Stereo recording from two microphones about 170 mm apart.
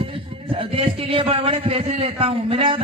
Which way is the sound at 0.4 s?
30° right (ahead or behind).